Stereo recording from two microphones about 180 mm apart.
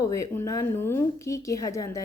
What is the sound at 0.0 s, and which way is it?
A woman's voice, 15° left (ahead or behind).